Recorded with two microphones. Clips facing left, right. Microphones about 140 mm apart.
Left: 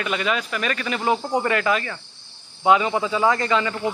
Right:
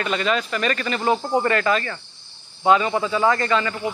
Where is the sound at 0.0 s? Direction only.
10° left (ahead or behind).